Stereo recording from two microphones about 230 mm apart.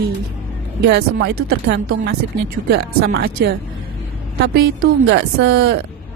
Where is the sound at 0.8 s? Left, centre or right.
Right.